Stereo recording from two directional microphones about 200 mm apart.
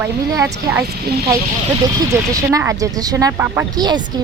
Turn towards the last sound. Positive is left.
turn(degrees=-20)  # may be behind; listen again after turning